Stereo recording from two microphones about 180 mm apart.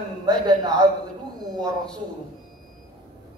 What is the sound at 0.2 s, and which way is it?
Speech, 25° right (ahead or behind).